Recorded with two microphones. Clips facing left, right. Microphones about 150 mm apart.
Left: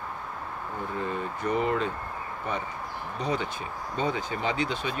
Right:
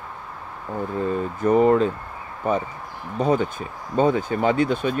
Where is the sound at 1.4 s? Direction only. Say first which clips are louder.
Right 11 dB; 45° right (ahead or behind).